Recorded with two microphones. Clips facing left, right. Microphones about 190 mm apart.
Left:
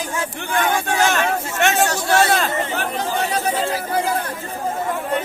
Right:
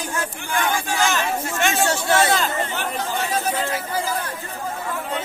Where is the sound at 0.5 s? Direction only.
60° left (ahead or behind).